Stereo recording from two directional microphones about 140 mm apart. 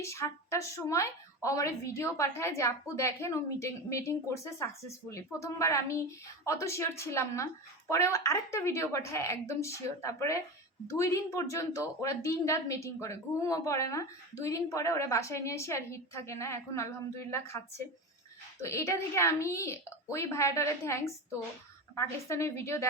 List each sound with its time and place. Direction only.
0.0 s a woman's voice: 20° left (ahead or behind)
18.6 s a woman's voice: 20° left (ahead or behind)